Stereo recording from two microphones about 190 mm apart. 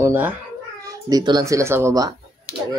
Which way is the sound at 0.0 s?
10° right (ahead or behind).